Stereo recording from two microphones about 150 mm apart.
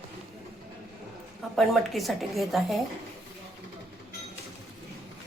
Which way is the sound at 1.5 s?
Centre (ahead or behind).